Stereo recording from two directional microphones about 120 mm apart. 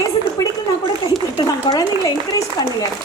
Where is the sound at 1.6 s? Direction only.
30° left (ahead or behind).